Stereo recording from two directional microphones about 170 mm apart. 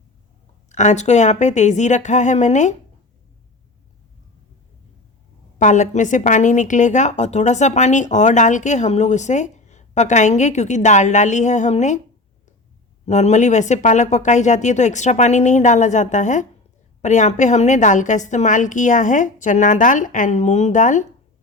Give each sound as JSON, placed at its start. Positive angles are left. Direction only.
{"t": 0.7, "sound": "a woman's voice", "side_deg": 45}
{"t": 5.5, "sound": "a woman's voice", "side_deg": 45}
{"t": 13.1, "sound": "a woman's voice", "side_deg": 45}